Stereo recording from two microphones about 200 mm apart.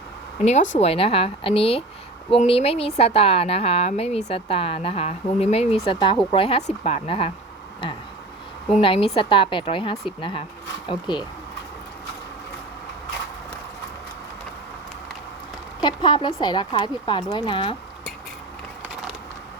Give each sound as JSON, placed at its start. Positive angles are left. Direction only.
{"t": 0.8, "sound": "a woman's voice", "side_deg": 30}
{"t": 8.7, "sound": "a woman's voice", "side_deg": 25}
{"t": 15.8, "sound": "a woman's voice", "side_deg": 20}